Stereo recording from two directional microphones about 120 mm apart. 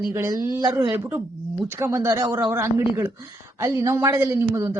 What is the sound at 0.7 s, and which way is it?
Speech, 45° right (ahead or behind).